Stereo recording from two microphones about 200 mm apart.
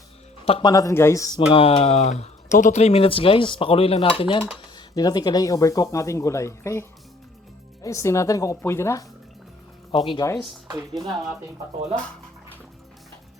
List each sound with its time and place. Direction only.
0.4 s speech: 30° left (ahead or behind)
0.7 s speech: 15° left (ahead or behind)
9.9 s speech: 25° left (ahead or behind)
10.9 s speech: centre (ahead or behind)